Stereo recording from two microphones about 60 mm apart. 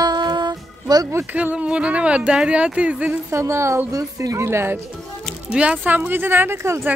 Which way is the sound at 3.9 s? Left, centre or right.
Right.